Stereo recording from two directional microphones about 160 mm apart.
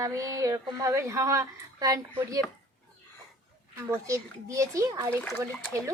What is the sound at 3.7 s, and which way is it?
A woman's voice, 20° right (ahead or behind).